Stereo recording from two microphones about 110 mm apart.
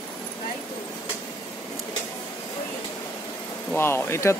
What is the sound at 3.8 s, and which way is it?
Speech, 20° left (ahead or behind).